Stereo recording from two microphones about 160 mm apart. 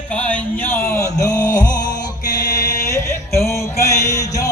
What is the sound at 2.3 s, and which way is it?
Mantra, 20° left (ahead or behind).